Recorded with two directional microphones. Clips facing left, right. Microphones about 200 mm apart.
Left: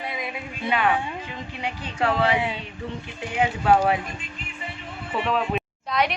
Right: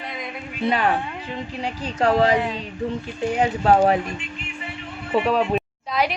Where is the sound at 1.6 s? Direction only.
40° right (ahead or behind).